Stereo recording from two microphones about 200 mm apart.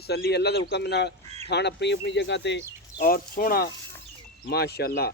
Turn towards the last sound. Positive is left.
turn(degrees=55)  # may be behind; listen again after turning